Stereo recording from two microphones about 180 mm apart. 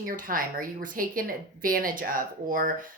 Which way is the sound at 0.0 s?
50° right (ahead or behind).